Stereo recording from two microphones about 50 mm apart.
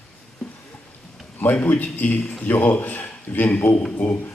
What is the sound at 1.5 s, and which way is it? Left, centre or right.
Speech, left.